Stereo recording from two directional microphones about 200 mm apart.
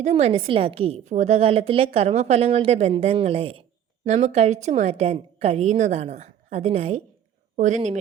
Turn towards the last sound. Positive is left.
turn(degrees=-35)  # may be behind; listen again after turning